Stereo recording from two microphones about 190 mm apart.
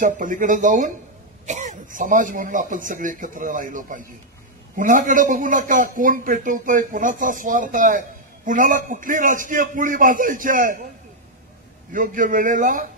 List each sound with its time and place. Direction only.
0.0 s a man's voice: 40° right (ahead or behind)
11.9 s a man's voice: 45° right (ahead or behind)